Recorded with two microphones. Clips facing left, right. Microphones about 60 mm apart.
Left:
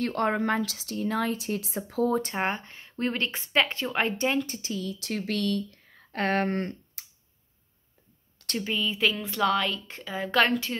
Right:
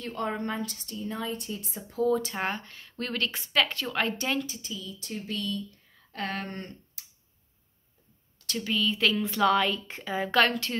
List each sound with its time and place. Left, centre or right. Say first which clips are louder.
0.0 s a woman's voice: left 6 dB; left
2.0 s speech: right 2 dB; left
2.3 s speech: left 3 dB; left
4.5 s speech: left 6 dB; left
8.5 s speech: even; centre
10.4 s speech: left 3 dB; centre